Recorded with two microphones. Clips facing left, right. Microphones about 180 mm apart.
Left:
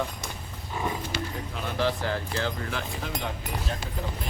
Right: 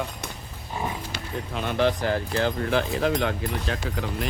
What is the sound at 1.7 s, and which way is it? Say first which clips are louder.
Speech: right 4 dB; 60° right (ahead or behind).